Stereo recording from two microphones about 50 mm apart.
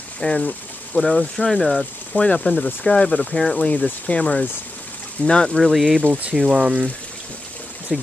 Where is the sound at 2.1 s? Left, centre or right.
Left.